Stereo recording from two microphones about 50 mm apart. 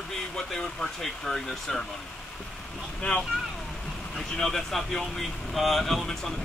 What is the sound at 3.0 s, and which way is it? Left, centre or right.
Speech, centre.